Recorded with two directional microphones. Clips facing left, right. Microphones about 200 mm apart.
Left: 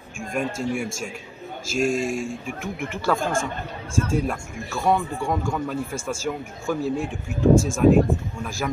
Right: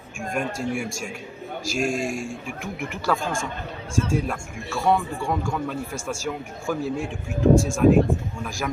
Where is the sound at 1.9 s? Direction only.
45° right (ahead or behind).